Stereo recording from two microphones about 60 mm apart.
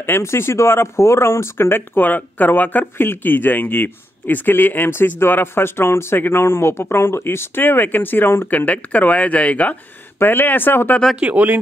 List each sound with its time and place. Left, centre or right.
0.0 s speech: left
8.5 s speech: left
10.1 s speech: left
11.1 s speech: right